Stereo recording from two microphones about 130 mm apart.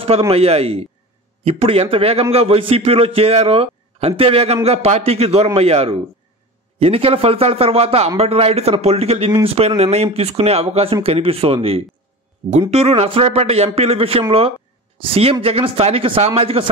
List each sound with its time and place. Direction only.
0.3 s a man's voice: 50° right (ahead or behind)
12.4 s speech: 35° right (ahead or behind)
12.7 s a man's voice: 50° right (ahead or behind)